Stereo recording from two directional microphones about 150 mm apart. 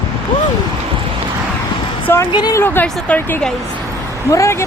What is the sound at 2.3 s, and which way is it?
Speech, 25° left (ahead or behind).